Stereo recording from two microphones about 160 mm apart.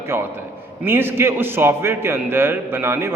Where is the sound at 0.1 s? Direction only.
15° right (ahead or behind).